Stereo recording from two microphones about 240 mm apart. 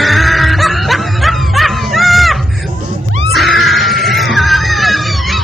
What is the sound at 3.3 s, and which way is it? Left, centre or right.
Music, centre.